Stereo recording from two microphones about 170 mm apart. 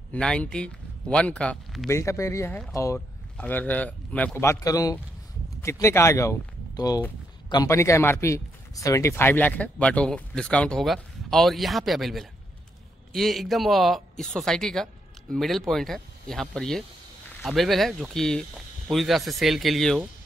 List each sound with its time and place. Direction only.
0.1 s speech: 5° left (ahead or behind)
1.9 s a man's voice: 15° left (ahead or behind); by 20.1 s centre (ahead or behind)